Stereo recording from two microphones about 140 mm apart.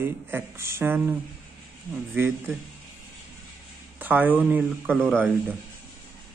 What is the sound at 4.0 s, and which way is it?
A man's voice, 15° right (ahead or behind).